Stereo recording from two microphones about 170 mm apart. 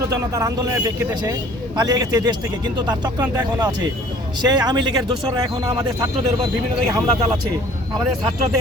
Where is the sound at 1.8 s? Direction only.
20° right (ahead or behind).